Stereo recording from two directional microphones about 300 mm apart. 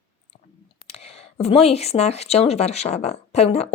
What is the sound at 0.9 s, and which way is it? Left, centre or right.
Speech, centre.